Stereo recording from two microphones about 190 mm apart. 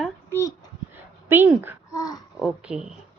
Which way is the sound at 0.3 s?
15° left (ahead or behind).